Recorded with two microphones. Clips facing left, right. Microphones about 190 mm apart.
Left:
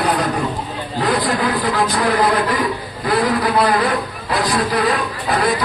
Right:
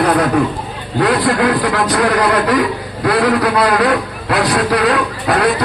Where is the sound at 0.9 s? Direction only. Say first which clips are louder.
Right 5 dB; 70° right (ahead or behind).